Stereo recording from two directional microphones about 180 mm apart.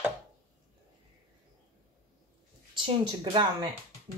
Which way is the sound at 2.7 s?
25° right (ahead or behind).